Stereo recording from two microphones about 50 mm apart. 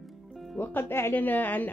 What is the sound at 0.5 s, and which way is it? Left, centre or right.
Speech, left.